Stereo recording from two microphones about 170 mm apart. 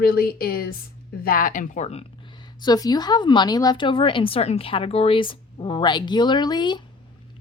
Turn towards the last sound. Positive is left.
turn(degrees=25)  # may be behind; listen again after turning